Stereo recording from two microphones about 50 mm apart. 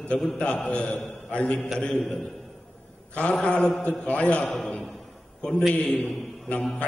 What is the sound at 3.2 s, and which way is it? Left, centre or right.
A man's voice, left.